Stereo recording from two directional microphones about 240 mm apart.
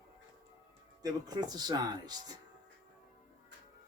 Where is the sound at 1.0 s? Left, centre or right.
Centre.